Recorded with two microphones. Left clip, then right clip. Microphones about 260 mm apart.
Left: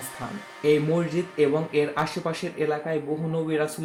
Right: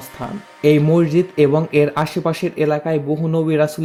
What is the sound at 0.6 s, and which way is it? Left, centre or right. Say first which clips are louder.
Speech: right 8 dB; right.